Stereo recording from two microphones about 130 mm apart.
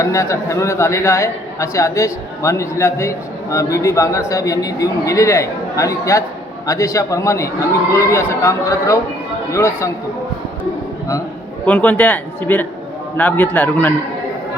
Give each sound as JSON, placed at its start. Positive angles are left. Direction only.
{"t": 0.0, "sound": "a man's voice", "side_deg": 25}
{"t": 11.6, "sound": "a man's voice", "side_deg": 10}